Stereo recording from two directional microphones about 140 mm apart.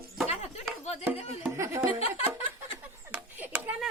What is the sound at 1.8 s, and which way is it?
Speech, 40° left (ahead or behind).